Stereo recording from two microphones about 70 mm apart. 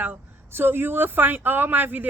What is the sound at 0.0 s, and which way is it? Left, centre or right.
A woman's voice, right.